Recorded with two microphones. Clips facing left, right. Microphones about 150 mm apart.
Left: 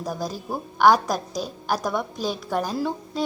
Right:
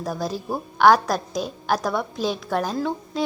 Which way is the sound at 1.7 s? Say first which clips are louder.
Right 2 dB; 15° left (ahead or behind).